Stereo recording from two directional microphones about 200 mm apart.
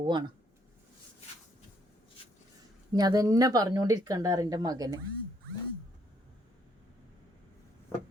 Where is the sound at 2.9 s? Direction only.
20° right (ahead or behind).